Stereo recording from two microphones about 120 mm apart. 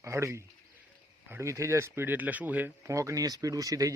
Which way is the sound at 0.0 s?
25° right (ahead or behind).